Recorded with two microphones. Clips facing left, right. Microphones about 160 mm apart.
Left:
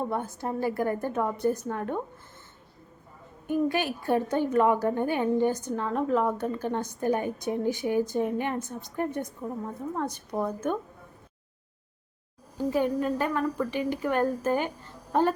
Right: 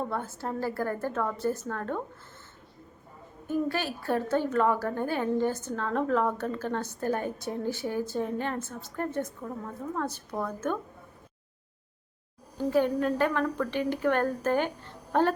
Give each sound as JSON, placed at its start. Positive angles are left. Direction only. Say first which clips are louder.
{"t": 0.0, "sound": "a woman's voice", "louder": "left 2 dB", "side_deg": 15}
{"t": 3.4, "sound": "a woman's voice", "louder": "left 3 dB", "side_deg": 15}
{"t": 12.5, "sound": "a woman's voice", "louder": "right 1 dB", "side_deg": 10}